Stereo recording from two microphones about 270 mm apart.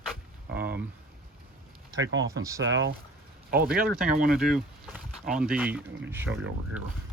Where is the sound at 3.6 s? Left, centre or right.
Centre.